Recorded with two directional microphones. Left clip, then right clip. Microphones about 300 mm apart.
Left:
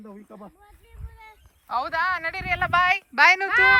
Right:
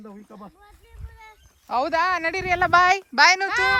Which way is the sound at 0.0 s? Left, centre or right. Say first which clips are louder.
Right 1 dB; right.